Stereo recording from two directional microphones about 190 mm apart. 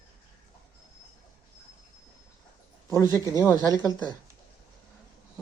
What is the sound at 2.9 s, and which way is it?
Speech, 15° left (ahead or behind).